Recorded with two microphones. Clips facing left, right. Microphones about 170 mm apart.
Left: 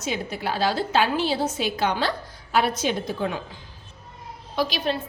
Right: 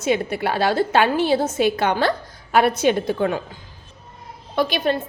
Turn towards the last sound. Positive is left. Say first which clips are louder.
# right 5 dB
turn(degrees=-55)  # may be behind; listen again after turning